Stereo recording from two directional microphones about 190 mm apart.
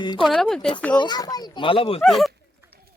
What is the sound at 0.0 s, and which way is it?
Speech, 25° left (ahead or behind).